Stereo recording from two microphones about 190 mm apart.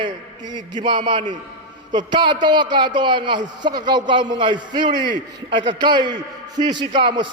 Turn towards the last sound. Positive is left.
turn(degrees=-25)  # may be behind; listen again after turning